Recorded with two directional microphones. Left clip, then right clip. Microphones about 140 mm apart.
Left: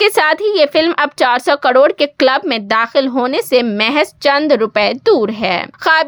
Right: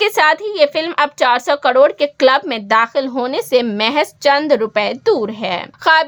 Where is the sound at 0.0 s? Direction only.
40° left (ahead or behind).